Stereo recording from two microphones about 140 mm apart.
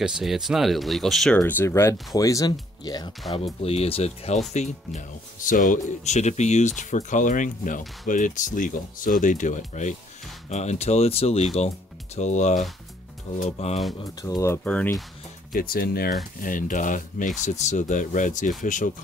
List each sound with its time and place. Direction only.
0.0 s speech: 5° right (ahead or behind)
1.4 s speech: 15° left (ahead or behind)
3.6 s speech: 45° left (ahead or behind)
12.2 s speech: 55° left (ahead or behind)
14.2 s speech: 20° left (ahead or behind)
14.6 s speech: 10° left (ahead or behind)
15.5 s speech: 90° left
16.3 s speech: 75° left (ahead or behind)